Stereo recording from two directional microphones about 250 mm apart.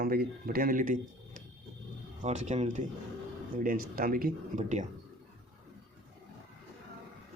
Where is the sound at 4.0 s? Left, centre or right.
Right.